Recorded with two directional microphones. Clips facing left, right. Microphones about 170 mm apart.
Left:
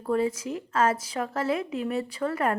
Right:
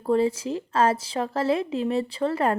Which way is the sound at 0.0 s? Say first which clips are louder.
Right 4 dB; 30° right (ahead or behind).